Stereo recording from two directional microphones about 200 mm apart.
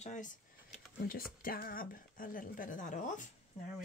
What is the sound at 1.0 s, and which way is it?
Speech, 45° left (ahead or behind).